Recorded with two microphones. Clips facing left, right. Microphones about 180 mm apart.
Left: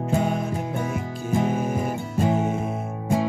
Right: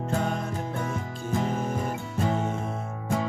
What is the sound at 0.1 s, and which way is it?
Music, 10° left (ahead or behind).